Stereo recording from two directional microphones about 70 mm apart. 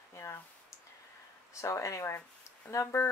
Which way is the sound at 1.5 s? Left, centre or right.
Left.